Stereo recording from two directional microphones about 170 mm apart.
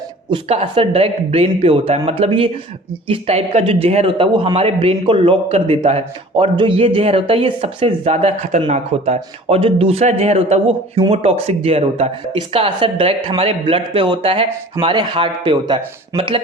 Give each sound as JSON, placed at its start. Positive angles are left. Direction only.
{"t": 0.3, "sound": "a man's voice", "side_deg": -35}